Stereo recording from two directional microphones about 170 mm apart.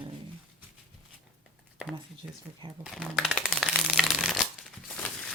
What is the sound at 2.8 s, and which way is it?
Speech, 5° right (ahead or behind).